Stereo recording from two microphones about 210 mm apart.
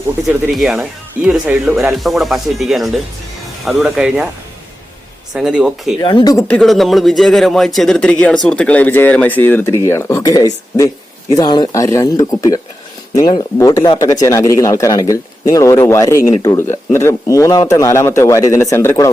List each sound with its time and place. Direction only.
0.3 s speech: centre (ahead or behind)
5.3 s speech: 5° right (ahead or behind)
6.0 s speech: 20° left (ahead or behind)
6.5 s speech: centre (ahead or behind)